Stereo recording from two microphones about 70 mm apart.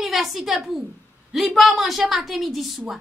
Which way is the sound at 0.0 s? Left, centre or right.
Centre.